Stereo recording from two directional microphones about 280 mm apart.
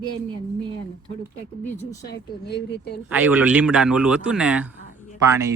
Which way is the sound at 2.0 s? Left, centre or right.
Left.